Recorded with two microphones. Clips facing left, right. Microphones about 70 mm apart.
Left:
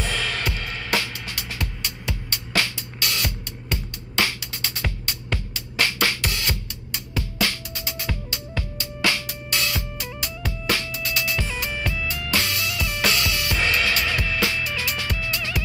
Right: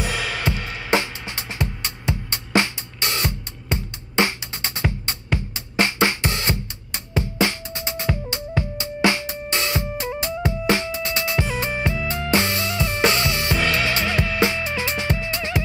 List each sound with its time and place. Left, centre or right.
0.0 s music: centre